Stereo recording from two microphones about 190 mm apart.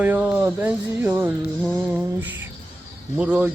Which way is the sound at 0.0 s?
10° right (ahead or behind).